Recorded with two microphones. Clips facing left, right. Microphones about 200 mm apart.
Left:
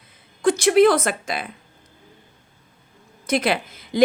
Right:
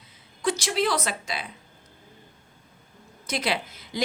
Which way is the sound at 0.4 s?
55° left (ahead or behind).